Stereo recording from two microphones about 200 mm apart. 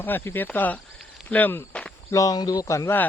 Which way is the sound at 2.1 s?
15° left (ahead or behind).